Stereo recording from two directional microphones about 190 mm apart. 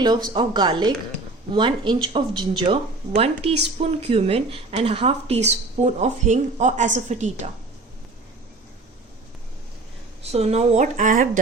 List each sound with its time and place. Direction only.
0.3 s speech: 25° right (ahead or behind)
10.3 s speech: 35° right (ahead or behind)